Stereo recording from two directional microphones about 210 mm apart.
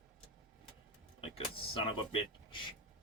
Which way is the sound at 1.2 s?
25° left (ahead or behind).